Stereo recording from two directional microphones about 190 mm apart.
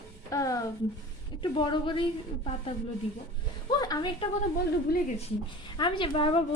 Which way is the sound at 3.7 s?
20° left (ahead or behind).